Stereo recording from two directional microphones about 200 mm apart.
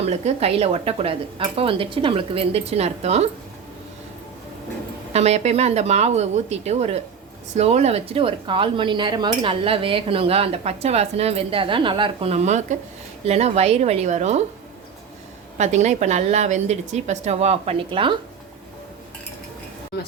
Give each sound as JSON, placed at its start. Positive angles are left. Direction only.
{"t": 0.0, "sound": "a woman's voice", "side_deg": -30}
{"t": 5.1, "sound": "a woman's voice", "side_deg": -35}
{"t": 15.5, "sound": "a woman's voice", "side_deg": -35}